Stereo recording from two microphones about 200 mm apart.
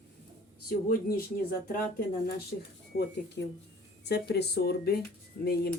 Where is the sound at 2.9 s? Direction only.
50° left (ahead or behind).